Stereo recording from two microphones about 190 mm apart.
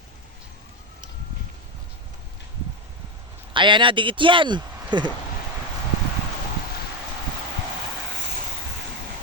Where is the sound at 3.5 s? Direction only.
25° right (ahead or behind).